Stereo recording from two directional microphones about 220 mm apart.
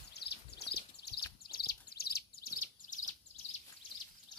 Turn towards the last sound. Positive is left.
turn(degrees=40)  # may be behind; listen again after turning